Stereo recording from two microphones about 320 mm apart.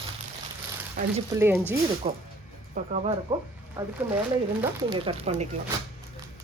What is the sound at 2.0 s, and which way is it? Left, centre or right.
Speech, centre.